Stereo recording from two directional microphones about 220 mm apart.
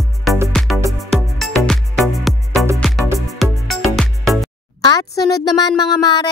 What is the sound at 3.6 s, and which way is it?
Music, centre (ahead or behind).